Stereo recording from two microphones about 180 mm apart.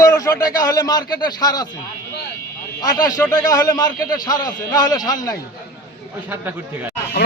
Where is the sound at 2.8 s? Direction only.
20° left (ahead or behind).